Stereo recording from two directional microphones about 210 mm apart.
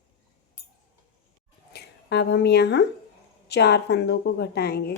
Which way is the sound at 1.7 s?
55° left (ahead or behind).